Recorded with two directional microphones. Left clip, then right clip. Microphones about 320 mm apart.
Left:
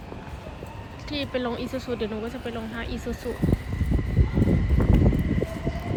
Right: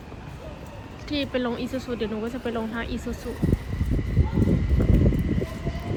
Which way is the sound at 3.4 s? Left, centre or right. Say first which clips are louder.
Even; left.